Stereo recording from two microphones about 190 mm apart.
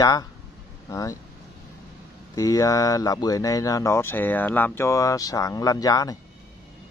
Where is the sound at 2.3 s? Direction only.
20° left (ahead or behind).